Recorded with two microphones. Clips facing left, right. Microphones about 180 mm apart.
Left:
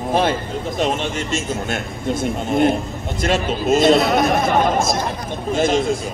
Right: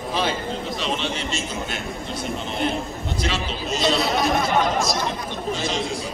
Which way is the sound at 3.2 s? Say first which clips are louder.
Left 11 dB; 50° left (ahead or behind).